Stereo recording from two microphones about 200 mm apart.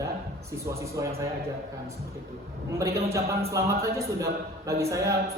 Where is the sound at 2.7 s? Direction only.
15° right (ahead or behind).